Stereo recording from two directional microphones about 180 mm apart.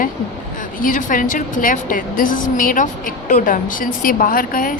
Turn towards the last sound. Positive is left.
turn(degrees=50)  # may be behind; listen again after turning